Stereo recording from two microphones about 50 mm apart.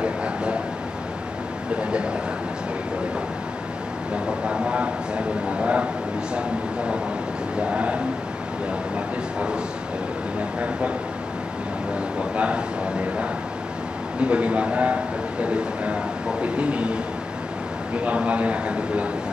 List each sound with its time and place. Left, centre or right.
0.0 s a sound: right
1.8 s speech: right
4.5 s speech: right
7.7 s speech: right
12.2 s speech: right
14.2 s speech: right
18.0 s speech: right